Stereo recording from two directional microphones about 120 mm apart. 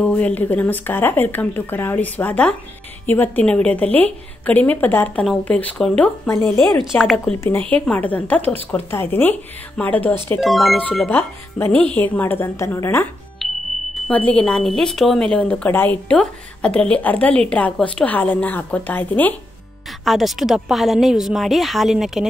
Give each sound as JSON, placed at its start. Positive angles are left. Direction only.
{"t": 0.0, "sound": "a woman's voice", "side_deg": 10}
{"t": 7.3, "sound": "a woman's voice", "side_deg": 20}
{"t": 10.4, "sound": "speech", "side_deg": 0}
{"t": 10.8, "sound": "a woman's voice", "side_deg": 10}
{"t": 13.4, "sound": "music", "side_deg": 0}
{"t": 14.0, "sound": "a woman's voice", "side_deg": 10}
{"t": 20.1, "sound": "speech", "side_deg": 0}